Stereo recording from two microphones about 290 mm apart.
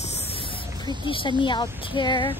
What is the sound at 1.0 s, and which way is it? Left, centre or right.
Speech, centre.